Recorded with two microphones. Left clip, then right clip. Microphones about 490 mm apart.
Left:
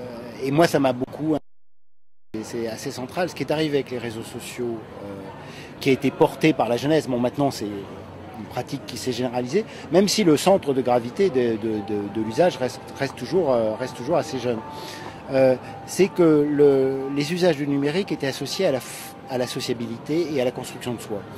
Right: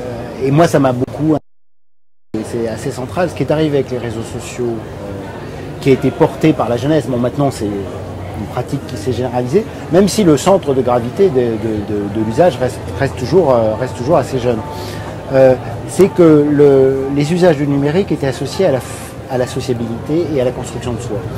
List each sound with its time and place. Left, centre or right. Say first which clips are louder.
0.4 s speech: right 7 dB; centre
2.6 s speech: right 9 dB; centre
5.9 s speech: right 7 dB; centre
8.5 s speech: right 7 dB; centre